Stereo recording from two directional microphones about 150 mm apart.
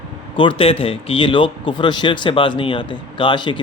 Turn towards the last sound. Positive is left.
turn(degrees=35)  # may be behind; listen again after turning